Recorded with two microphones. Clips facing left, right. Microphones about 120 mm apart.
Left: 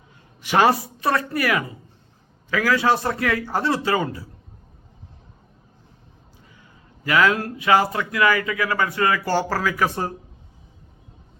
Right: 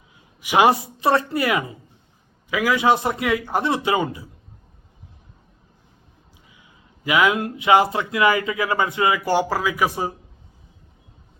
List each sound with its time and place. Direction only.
0.4 s speech: 15° right (ahead or behind)
7.0 s speech: 15° right (ahead or behind)